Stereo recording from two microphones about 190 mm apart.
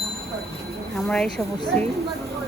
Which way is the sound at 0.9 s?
5° left (ahead or behind).